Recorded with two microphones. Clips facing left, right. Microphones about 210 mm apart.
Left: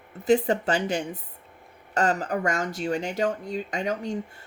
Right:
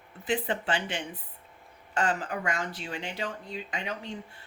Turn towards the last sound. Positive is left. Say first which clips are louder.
# left 8 dB
turn(degrees=45)  # may be behind; listen again after turning